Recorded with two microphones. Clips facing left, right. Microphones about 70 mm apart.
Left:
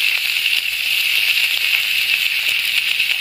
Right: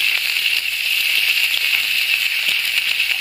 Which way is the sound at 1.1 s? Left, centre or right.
Centre.